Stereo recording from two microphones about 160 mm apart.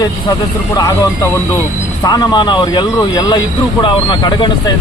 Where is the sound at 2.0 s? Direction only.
25° left (ahead or behind).